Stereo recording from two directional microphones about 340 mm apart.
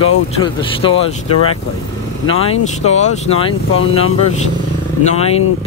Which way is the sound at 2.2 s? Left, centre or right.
Centre.